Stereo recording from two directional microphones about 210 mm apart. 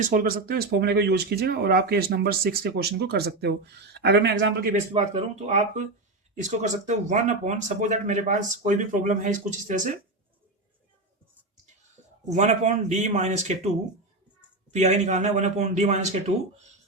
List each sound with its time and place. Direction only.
0.0 s speech: 40° right (ahead or behind)
4.9 s speech: 35° right (ahead or behind)
12.3 s speech: 35° right (ahead or behind)
14.7 s speech: 30° right (ahead or behind)